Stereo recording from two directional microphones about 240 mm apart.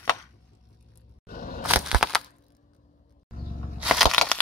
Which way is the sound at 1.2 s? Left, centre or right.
Left.